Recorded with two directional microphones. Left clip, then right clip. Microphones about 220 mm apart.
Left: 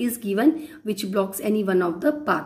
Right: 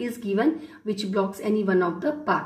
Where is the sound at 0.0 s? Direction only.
30° left (ahead or behind).